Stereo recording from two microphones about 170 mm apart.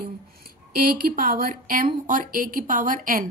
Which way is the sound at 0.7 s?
55° right (ahead or behind).